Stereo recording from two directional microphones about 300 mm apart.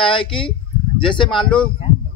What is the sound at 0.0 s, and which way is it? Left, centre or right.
A man's voice, centre.